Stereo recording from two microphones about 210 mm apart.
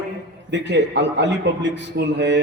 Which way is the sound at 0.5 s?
55° right (ahead or behind).